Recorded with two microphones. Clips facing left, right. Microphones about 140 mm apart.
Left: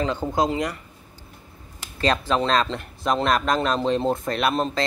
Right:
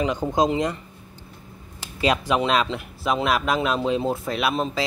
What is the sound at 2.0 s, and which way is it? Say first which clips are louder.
Speech: even; 10° right (ahead or behind).